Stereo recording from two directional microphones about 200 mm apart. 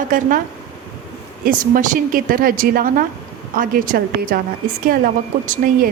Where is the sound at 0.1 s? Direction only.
45° right (ahead or behind).